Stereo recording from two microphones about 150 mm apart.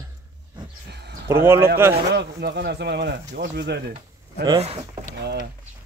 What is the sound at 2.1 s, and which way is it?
Speech, 90° right.